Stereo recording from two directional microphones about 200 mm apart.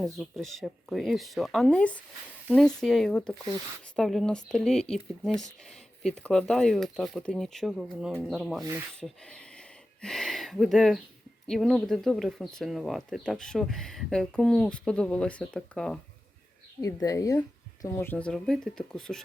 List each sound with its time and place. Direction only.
0.0 s speech: centre (ahead or behind)
9.0 s a sound: 5° left (ahead or behind)
11.4 s speech: centre (ahead or behind)
16.8 s a woman's voice: 15° left (ahead or behind)